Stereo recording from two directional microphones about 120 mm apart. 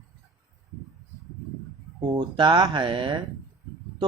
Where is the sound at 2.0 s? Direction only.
40° right (ahead or behind).